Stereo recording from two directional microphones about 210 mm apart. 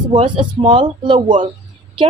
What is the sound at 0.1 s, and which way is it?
A woman's voice, 25° right (ahead or behind).